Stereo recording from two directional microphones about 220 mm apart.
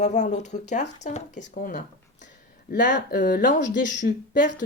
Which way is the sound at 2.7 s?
50° left (ahead or behind).